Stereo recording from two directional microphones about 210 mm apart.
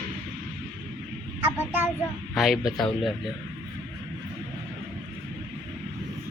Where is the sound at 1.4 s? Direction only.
10° right (ahead or behind).